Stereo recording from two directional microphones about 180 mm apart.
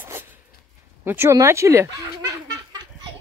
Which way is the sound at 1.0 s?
10° right (ahead or behind).